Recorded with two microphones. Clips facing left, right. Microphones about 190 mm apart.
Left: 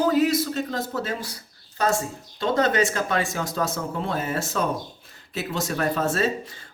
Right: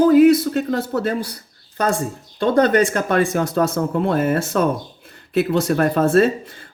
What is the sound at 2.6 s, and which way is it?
Speech, 60° right (ahead or behind).